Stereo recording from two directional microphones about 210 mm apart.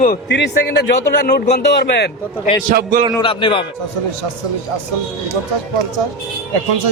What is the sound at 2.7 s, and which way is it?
Speech, 45° right (ahead or behind).